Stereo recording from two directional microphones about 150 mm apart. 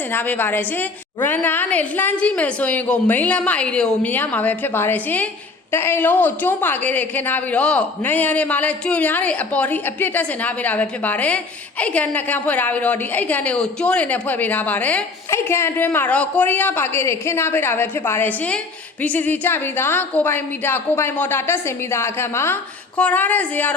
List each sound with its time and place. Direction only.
0.1 s a woman's voice: 10° left (ahead or behind)